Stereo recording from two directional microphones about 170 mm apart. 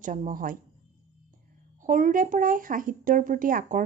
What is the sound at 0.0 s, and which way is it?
Speech, 50° right (ahead or behind).